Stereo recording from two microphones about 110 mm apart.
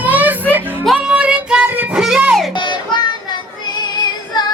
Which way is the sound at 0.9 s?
10° right (ahead or behind).